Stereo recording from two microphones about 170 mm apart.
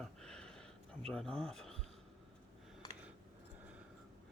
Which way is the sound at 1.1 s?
5° left (ahead or behind).